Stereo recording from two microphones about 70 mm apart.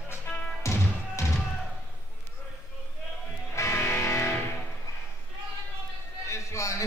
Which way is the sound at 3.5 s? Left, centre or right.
Left.